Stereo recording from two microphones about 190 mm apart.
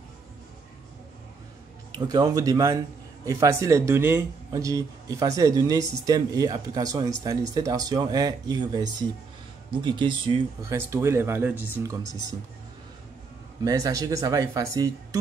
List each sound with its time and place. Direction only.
2.0 s speech: 20° right (ahead or behind)
13.7 s speech: 15° right (ahead or behind)